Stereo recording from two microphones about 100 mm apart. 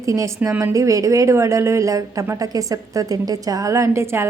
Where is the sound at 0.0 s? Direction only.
30° right (ahead or behind).